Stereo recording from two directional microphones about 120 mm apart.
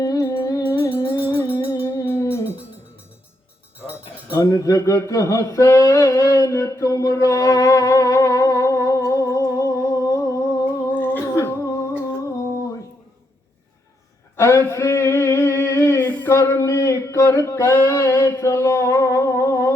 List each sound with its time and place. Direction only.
0.0 s music: 30° left (ahead or behind)
1.1 s music: 40° left (ahead or behind)
1.7 s music: 30° left (ahead or behind)
4.4 s a sound: 25° left (ahead or behind)
10.9 s humming: 15° left (ahead or behind)
14.3 s a sound: 25° left (ahead or behind)